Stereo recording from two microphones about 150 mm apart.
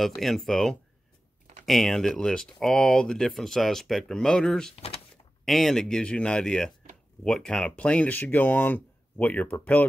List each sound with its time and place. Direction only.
0.0 s speech: centre (ahead or behind)
4.7 s door: 40° left (ahead or behind)
5.4 s speech: centre (ahead or behind)